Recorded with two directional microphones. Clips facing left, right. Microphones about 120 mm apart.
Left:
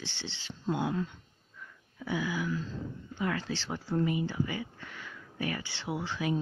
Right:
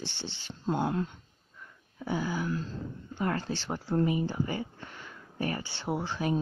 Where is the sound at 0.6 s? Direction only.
45° right (ahead or behind).